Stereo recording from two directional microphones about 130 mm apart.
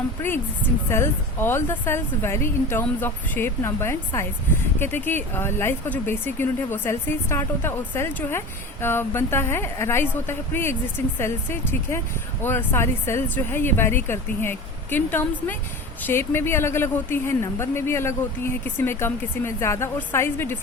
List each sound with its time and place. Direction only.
0.9 s a woman's voice: 20° left (ahead or behind)